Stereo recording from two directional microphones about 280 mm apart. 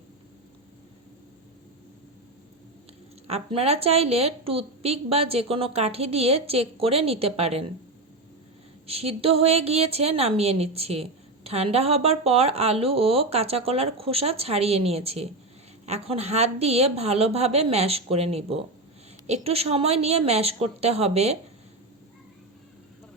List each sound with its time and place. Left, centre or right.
3.2 s a woman's voice: right
8.9 s a woman's voice: right